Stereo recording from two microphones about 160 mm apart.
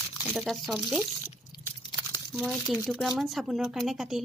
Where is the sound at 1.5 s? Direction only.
30° left (ahead or behind).